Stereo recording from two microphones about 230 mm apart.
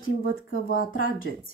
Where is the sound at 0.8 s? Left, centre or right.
Left.